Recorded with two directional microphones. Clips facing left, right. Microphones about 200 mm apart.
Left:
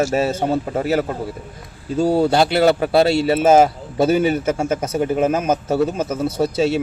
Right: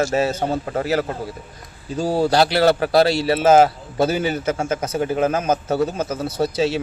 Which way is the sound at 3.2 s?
25° left (ahead or behind).